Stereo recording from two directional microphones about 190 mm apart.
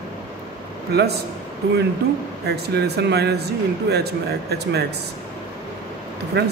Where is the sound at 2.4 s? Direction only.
60° right (ahead or behind).